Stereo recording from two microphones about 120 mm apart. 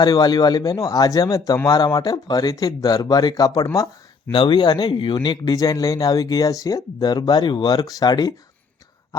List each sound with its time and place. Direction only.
0.0 s speech: 35° left (ahead or behind)